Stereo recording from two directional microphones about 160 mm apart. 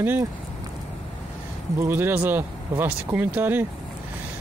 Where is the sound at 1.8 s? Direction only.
15° right (ahead or behind).